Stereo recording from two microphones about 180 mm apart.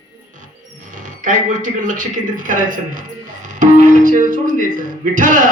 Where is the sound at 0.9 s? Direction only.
45° right (ahead or behind).